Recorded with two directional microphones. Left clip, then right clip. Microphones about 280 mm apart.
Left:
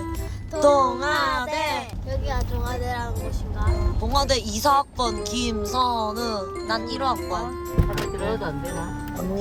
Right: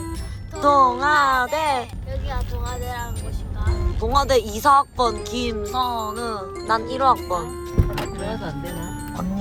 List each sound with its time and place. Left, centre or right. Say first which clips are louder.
0.6 s music: right 2 dB; centre
2.3 s music: even; left
4.0 s speech: right 5 dB; centre